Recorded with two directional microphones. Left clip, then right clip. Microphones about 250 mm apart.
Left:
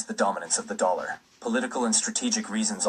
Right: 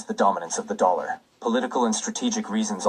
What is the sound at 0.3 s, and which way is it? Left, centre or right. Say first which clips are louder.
Speech: right 3 dB; right.